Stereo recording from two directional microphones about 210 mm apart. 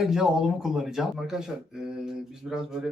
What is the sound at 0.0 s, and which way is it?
Speech, centre (ahead or behind).